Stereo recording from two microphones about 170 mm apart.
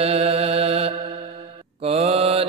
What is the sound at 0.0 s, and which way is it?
Mantra, 35° right (ahead or behind).